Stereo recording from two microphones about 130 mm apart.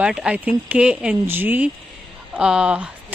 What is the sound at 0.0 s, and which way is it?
Speech, 5° right (ahead or behind).